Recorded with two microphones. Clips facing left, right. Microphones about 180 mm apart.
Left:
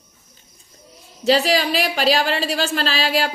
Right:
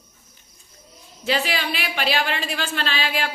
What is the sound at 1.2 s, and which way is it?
A man's voice, 40° left (ahead or behind).